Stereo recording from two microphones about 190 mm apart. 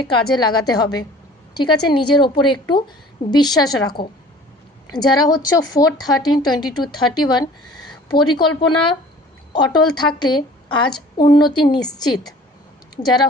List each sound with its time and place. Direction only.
0.0 s a woman's voice: 20° left (ahead or behind)